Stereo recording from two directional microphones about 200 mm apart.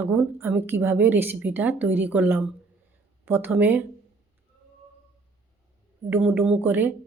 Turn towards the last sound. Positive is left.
turn(degrees=-10)  # may be behind; listen again after turning